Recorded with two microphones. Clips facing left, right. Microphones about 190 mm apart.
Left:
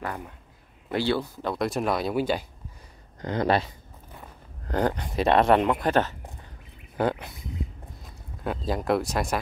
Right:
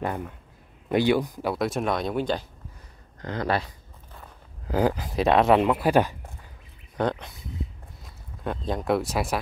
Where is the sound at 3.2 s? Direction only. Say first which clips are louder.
Left 3 dB; 20° left (ahead or behind).